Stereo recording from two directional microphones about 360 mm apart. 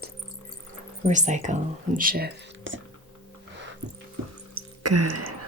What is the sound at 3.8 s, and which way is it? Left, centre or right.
Music, right.